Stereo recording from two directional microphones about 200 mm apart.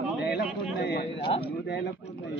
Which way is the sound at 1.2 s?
25° left (ahead or behind).